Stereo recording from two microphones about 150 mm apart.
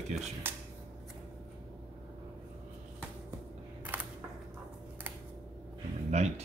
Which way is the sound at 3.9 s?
10° right (ahead or behind).